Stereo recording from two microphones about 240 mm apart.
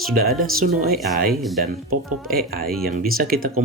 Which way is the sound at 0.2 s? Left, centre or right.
Right.